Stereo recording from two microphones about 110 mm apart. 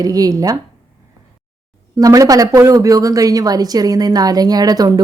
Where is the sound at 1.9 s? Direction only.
35° right (ahead or behind).